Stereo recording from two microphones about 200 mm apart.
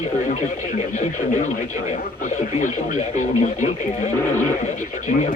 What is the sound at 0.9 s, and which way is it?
Speech, 35° left (ahead or behind).